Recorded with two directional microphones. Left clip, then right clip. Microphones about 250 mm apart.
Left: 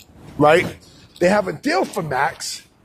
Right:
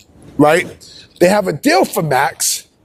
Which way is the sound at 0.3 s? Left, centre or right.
Right.